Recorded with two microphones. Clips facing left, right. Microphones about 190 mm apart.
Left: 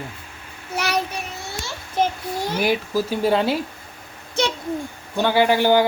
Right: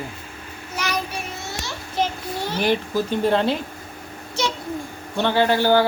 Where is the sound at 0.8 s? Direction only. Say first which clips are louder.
Left 3 dB; 65° left (ahead or behind).